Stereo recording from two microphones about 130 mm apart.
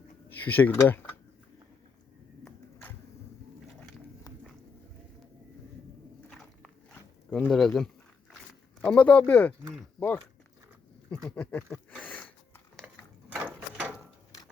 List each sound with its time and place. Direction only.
0.3 s speech: 15° left (ahead or behind)
7.3 s speech: 10° left (ahead or behind)
11.1 s a sound: 10° left (ahead or behind)
13.3 s mechanisms: 10° right (ahead or behind)